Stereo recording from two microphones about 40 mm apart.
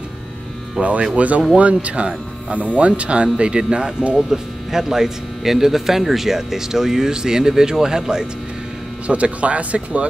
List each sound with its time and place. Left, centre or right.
0.8 s speech: right
9.0 s speech: right